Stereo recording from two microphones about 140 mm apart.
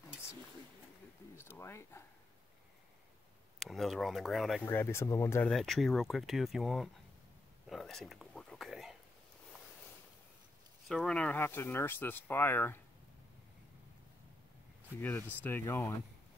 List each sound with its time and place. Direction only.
1.3 s a sound: 20° left (ahead or behind)
3.5 s speech: centre (ahead or behind)
4.6 s speech: 20° left (ahead or behind)
5.5 s speech: centre (ahead or behind)
7.6 s a sound: centre (ahead or behind)
10.9 s speech: 5° left (ahead or behind)
15.0 s speech: 15° left (ahead or behind)